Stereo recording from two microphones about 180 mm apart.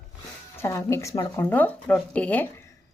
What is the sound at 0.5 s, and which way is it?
A woman's voice, 15° left (ahead or behind).